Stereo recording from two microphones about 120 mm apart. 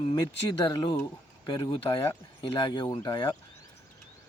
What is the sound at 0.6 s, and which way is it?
Speech, 40° left (ahead or behind).